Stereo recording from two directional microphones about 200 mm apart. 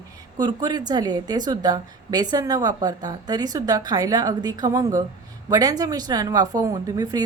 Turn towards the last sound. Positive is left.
turn(degrees=-20)  # may be behind; listen again after turning